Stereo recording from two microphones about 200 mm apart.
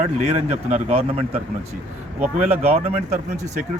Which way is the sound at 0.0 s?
35° right (ahead or behind).